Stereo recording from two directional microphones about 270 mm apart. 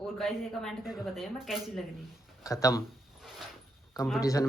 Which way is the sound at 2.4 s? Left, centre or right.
Centre.